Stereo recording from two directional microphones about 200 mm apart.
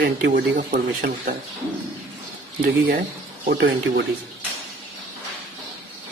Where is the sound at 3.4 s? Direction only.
55° right (ahead or behind).